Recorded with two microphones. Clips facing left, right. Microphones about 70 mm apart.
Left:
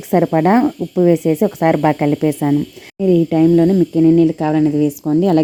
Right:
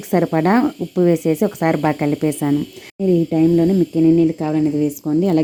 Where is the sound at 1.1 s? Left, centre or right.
Left.